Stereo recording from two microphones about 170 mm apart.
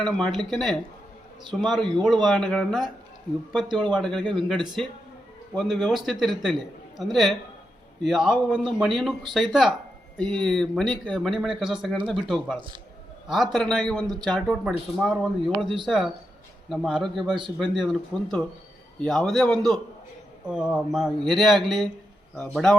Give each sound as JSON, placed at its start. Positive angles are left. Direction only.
{"t": 0.0, "sound": "speech", "side_deg": 0}
{"t": 15.6, "sound": "speech", "side_deg": -30}
{"t": 16.6, "sound": "speech", "side_deg": 0}